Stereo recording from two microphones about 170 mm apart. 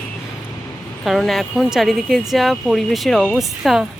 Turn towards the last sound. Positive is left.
turn(degrees=0)  # may be behind; listen again after turning